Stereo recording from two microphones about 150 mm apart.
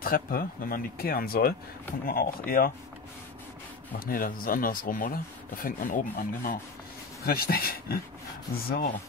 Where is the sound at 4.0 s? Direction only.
75° left (ahead or behind).